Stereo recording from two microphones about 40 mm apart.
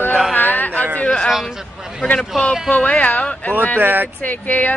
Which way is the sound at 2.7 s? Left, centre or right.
Left.